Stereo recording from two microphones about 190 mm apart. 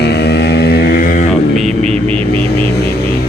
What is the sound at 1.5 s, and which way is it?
Vehicle, 5° left (ahead or behind).